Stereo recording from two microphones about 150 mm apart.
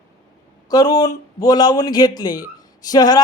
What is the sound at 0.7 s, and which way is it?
Speech, 25° left (ahead or behind).